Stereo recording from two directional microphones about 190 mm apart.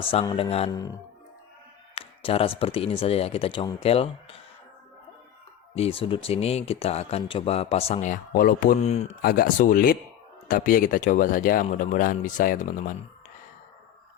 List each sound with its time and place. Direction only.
0.0 s speech: 30° left (ahead or behind)
0.7 s speech: 20° left (ahead or behind)
2.0 s speech: 30° left (ahead or behind)
5.7 s speech: 30° left (ahead or behind)
9.2 s speech: 50° left (ahead or behind)